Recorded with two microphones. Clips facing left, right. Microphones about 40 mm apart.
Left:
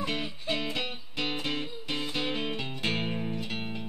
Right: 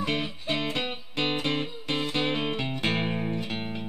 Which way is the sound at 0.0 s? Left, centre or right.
Centre.